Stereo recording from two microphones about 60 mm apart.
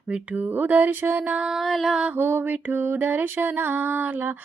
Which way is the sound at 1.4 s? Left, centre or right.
Centre.